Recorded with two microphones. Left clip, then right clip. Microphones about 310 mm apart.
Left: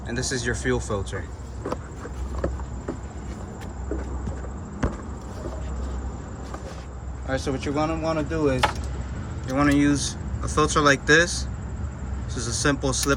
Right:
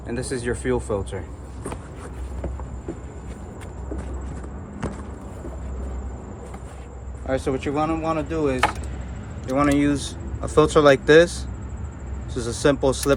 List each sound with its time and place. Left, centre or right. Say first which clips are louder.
0.1 s speech: even; centre
7.3 s speech: right 3 dB; right
9.6 s speech: right 1 dB; centre